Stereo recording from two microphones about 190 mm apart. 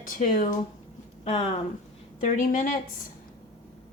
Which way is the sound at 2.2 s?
40° left (ahead or behind).